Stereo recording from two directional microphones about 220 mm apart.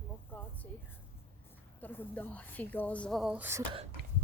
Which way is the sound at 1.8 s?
10° left (ahead or behind).